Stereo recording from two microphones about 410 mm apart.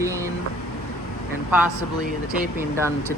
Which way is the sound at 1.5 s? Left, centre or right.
Centre.